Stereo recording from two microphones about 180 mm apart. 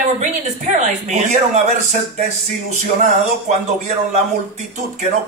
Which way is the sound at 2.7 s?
40° right (ahead or behind).